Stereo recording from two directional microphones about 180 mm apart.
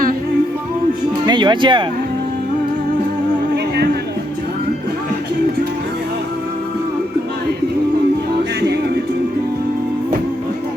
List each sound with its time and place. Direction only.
1.2 s speech: 25° right (ahead or behind)